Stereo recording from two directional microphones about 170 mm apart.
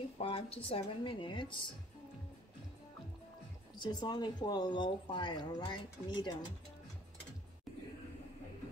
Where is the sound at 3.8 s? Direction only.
25° left (ahead or behind).